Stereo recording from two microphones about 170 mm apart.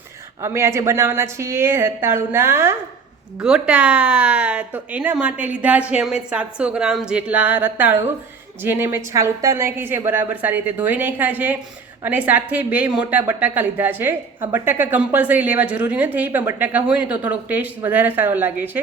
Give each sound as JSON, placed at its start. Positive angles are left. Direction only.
{"t": 0.4, "sound": "a woman's voice", "side_deg": -15}